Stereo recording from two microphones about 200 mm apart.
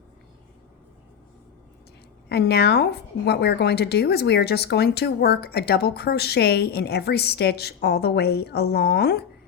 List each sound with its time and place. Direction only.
2.3 s speech: 55° left (ahead or behind)